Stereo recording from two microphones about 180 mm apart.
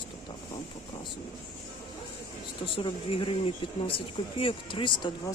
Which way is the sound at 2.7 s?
30° left (ahead or behind).